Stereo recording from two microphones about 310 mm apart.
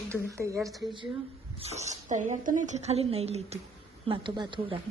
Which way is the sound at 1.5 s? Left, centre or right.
Centre.